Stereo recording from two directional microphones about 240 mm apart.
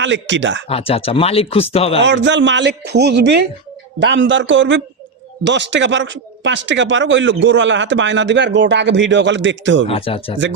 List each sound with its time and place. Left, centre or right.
0.0 s speech: right
0.7 s speech: left
2.0 s speech: right
9.9 s speech: left